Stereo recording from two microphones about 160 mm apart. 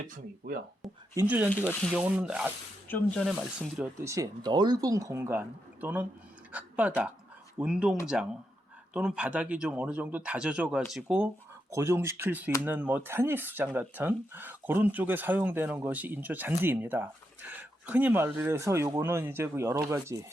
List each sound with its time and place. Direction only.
0.0 s speech: 65° right (ahead or behind)
1.1 s speech: 10° right (ahead or behind)
1.5 s speech: 10° left (ahead or behind)
1.9 s speech: 10° right (ahead or behind)
2.9 s speech: 5° left (ahead or behind)
4.0 s speech: 20° right (ahead or behind)
11.7 s speech: 15° right (ahead or behind)